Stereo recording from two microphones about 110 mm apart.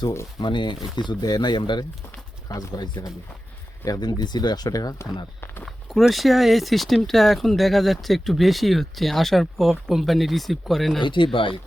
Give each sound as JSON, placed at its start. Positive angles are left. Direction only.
{"t": 0.4, "sound": "speech", "side_deg": 45}
{"t": 5.6, "sound": "speech", "side_deg": 0}
{"t": 11.0, "sound": "speech", "side_deg": 50}